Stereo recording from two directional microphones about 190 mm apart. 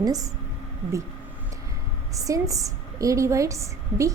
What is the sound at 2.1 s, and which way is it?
A woman's voice, 15° right (ahead or behind).